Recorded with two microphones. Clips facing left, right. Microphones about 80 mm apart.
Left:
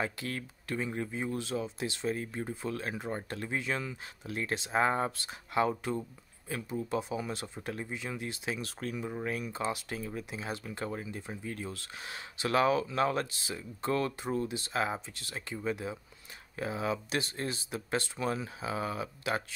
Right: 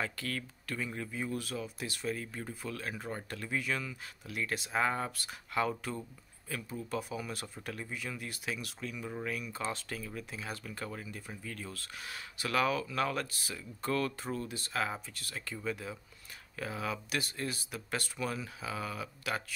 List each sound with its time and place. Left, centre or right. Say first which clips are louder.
0.0 s speech: left 2 dB; left
9.6 s speech: left 3 dB; centre